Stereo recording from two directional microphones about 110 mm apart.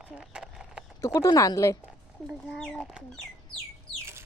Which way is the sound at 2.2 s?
Centre (ahead or behind).